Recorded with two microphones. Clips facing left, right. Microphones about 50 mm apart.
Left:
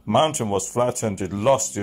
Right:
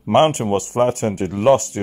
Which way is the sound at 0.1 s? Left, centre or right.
Right.